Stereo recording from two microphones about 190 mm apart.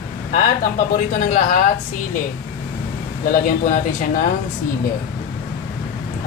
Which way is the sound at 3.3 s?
50° left (ahead or behind).